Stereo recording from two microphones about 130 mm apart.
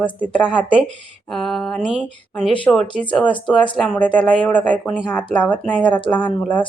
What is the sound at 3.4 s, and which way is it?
Speech, 40° left (ahead or behind).